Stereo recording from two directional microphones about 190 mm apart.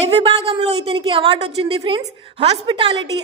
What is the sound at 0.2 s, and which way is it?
A woman's voice, 30° right (ahead or behind).